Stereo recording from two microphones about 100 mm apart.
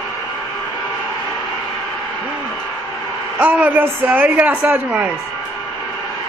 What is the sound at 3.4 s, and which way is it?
A man's voice, 15° right (ahead or behind).